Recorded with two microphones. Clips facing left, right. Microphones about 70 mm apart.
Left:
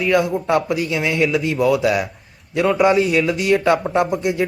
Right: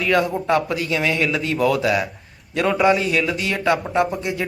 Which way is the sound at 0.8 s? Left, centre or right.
Left.